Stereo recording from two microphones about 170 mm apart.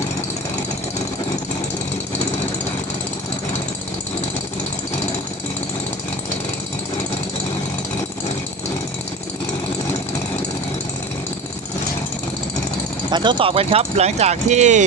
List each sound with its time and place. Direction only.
13.1 s speech: 25° right (ahead or behind); by 14.8 s 45° right (ahead or behind)